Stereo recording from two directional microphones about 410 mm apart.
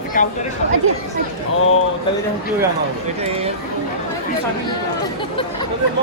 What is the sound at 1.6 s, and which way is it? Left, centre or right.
Speech, left.